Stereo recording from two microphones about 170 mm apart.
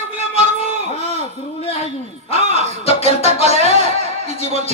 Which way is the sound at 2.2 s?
35° left (ahead or behind).